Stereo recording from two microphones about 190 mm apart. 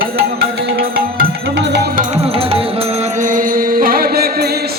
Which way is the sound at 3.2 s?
45° right (ahead or behind).